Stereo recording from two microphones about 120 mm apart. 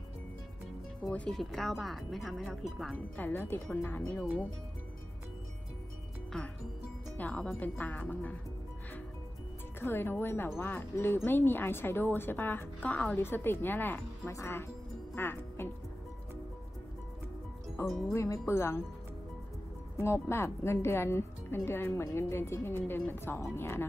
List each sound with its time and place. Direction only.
1.1 s speech: 5° left (ahead or behind)
3.2 s speech: 15° left (ahead or behind)
6.3 s music: 5° left (ahead or behind)
7.2 s speech: 10° left (ahead or behind)
9.8 s speech: 20° left (ahead or behind)
15.1 s music: 20° left (ahead or behind)
17.8 s speech: centre (ahead or behind)
18.1 s speech: 25° left (ahead or behind)
20.0 s speech: 20° left (ahead or behind)